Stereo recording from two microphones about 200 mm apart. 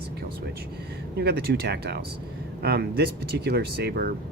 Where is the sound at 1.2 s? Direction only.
55° right (ahead or behind).